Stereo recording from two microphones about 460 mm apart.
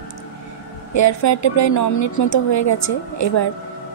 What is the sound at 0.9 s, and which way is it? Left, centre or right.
A woman's voice, left.